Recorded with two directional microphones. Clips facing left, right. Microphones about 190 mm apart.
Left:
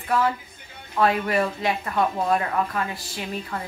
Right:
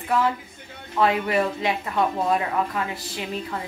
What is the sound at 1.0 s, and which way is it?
A woman's voice, 20° right (ahead or behind).